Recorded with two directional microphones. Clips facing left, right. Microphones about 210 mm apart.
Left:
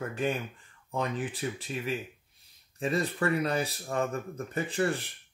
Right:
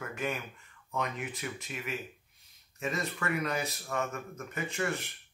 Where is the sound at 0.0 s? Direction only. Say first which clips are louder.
Left 5 dB; 30° left (ahead or behind).